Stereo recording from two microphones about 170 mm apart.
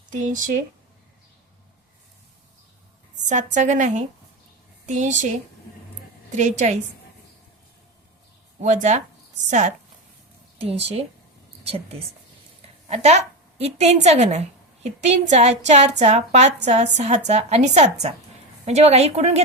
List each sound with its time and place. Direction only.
0.1 s a woman's voice: 50° right (ahead or behind)
3.2 s a woman's voice: 45° right (ahead or behind)
6.3 s a woman's voice: 45° right (ahead or behind)
8.6 s a woman's voice: 45° right (ahead or behind)